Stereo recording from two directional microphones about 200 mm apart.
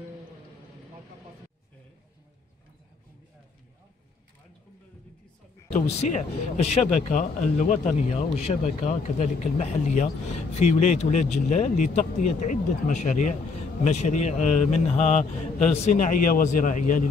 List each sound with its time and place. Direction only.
5.7 s speech: 35° left (ahead or behind)